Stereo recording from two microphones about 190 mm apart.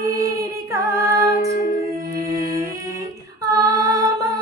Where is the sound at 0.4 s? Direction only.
15° right (ahead or behind).